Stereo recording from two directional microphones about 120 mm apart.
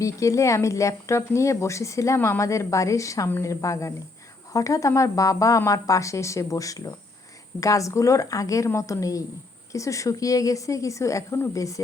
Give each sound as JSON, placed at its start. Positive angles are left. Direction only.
{"t": 0.0, "sound": "speech", "side_deg": 25}